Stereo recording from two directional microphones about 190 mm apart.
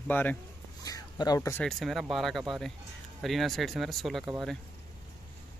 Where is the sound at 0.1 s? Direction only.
10° left (ahead or behind).